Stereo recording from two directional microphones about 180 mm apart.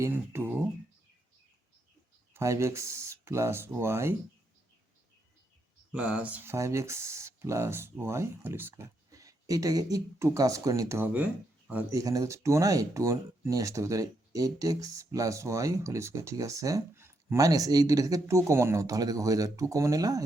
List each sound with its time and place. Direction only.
0.0 s speech: 15° right (ahead or behind)
2.3 s speech: 15° right (ahead or behind)
5.9 s speech: 5° right (ahead or behind)